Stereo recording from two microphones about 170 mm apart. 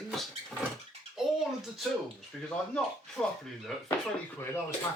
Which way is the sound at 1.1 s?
Centre (ahead or behind).